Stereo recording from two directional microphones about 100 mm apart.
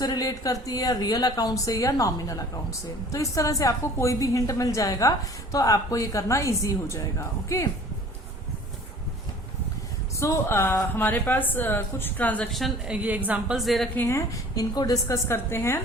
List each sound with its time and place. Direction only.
0.0 s speech: 40° left (ahead or behind)
10.2 s a woman's voice: 30° left (ahead or behind)
12.5 s a woman's voice: centre (ahead or behind)
12.9 s a woman's voice: 15° right (ahead or behind)
13.6 s a woman's voice: centre (ahead or behind)
13.9 s a woman's voice: 25° left (ahead or behind)